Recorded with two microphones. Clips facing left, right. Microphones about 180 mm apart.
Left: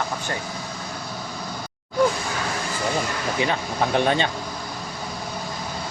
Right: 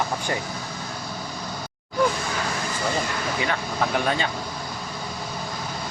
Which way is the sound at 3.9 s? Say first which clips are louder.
Left 5 dB; 25° left (ahead or behind).